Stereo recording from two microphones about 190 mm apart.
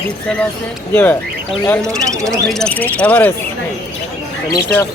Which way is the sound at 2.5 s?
5° left (ahead or behind).